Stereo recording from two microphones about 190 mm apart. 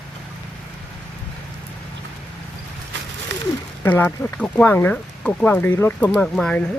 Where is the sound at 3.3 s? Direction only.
70° right (ahead or behind).